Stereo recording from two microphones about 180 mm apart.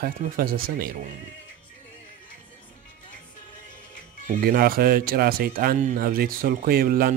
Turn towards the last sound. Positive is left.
turn(degrees=-55)  # may be behind; listen again after turning